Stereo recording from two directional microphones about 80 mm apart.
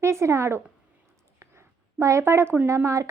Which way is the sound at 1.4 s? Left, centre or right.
Right.